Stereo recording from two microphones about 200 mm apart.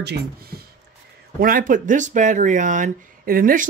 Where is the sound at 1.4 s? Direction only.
45° right (ahead or behind).